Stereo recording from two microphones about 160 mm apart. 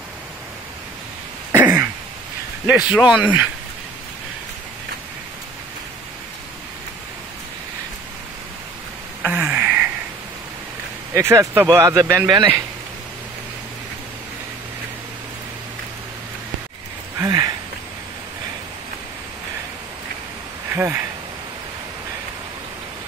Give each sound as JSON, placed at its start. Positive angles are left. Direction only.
{"t": 1.5, "sound": "throat clearing", "side_deg": -15}
{"t": 2.6, "sound": "speech", "side_deg": -10}
{"t": 9.2, "sound": "a sound", "side_deg": -10}
{"t": 11.1, "sound": "speech", "side_deg": -15}
{"t": 17.2, "sound": "a sound", "side_deg": -20}
{"t": 20.7, "sound": "speech", "side_deg": -15}